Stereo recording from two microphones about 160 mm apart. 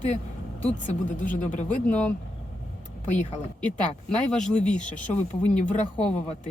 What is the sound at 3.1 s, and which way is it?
Speech, 50° left (ahead or behind).